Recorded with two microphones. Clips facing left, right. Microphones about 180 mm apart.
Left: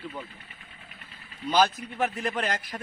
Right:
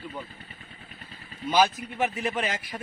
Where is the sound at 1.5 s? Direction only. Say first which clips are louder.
Right 1 dB; 10° right (ahead or behind).